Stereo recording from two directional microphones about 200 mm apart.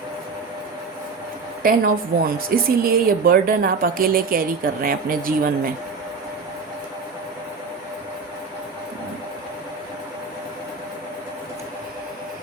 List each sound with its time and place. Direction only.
1.6 s a woman's voice: 45° right (ahead or behind)